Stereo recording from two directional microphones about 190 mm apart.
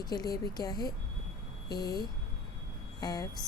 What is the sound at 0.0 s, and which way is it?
A woman's voice, 20° left (ahead or behind).